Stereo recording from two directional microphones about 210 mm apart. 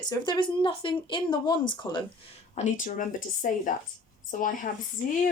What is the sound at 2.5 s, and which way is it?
Speech, 35° left (ahead or behind).